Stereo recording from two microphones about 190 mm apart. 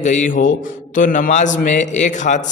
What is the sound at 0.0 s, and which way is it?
A man's voice, 40° left (ahead or behind).